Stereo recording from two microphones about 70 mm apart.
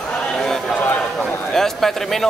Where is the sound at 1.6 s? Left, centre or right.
Centre.